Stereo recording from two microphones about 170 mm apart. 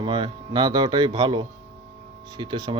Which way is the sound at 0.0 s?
25° right (ahead or behind).